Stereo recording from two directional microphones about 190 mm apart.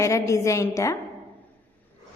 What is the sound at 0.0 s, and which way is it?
Speech, 15° left (ahead or behind).